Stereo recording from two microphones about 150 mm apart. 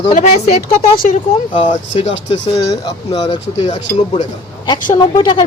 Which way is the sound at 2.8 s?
25° left (ahead or behind).